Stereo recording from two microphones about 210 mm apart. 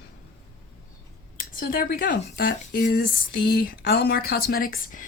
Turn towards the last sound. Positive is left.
turn(degrees=40)  # may be behind; listen again after turning